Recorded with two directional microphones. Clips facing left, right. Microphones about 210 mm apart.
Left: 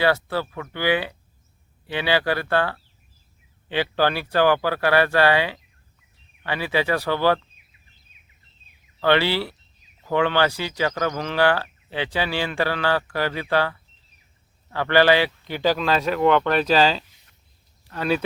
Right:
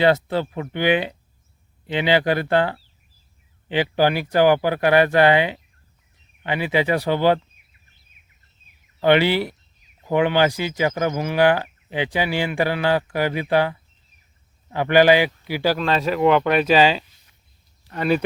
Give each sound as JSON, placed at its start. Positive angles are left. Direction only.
{"t": 0.0, "sound": "speech", "side_deg": -20}
{"t": 9.0, "sound": "speech", "side_deg": -15}